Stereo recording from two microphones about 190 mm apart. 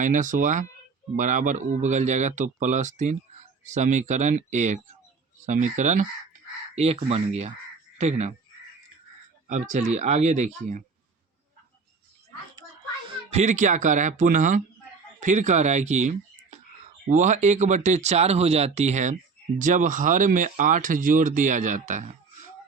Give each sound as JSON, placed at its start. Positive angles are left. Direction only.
{"t": 0.0, "sound": "speech", "side_deg": -40}
{"t": 9.5, "sound": "speech", "side_deg": -40}
{"t": 13.1, "sound": "speech", "side_deg": -35}